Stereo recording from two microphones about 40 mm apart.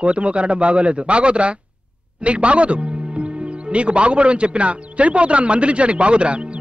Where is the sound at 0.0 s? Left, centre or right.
Right.